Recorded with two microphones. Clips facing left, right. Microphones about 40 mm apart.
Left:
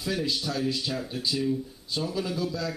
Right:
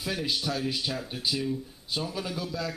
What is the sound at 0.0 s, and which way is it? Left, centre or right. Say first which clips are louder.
Speech: left 1 dB; centre.